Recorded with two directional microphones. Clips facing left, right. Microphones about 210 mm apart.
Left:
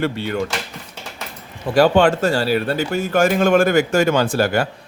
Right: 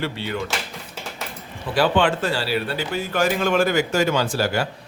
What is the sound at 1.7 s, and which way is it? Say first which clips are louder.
Speech: left 5 dB; 45° left (ahead or behind).